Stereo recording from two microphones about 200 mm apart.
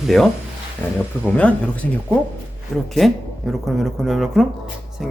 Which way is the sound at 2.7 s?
Centre (ahead or behind).